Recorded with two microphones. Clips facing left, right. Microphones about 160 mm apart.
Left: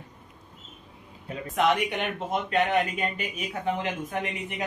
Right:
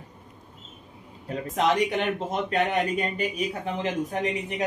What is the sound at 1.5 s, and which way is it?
Speech, 35° right (ahead or behind).